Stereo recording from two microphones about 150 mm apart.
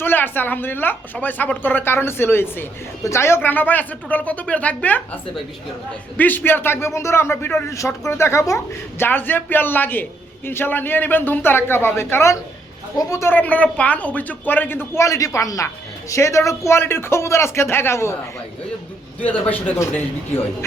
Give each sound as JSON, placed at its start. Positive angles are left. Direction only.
{"t": 0.0, "sound": "a man's voice", "side_deg": 15}
{"t": 6.1, "sound": "a man's voice", "side_deg": 10}
{"t": 19.2, "sound": "a man's voice", "side_deg": 10}